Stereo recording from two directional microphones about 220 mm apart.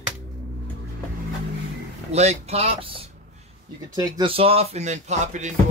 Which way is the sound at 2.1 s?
30° right (ahead or behind).